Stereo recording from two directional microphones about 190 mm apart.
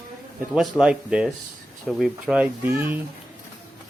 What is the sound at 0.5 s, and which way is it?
Speech, 5° right (ahead or behind).